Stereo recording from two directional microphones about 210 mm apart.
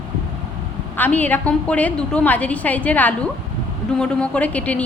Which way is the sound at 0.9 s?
10° left (ahead or behind).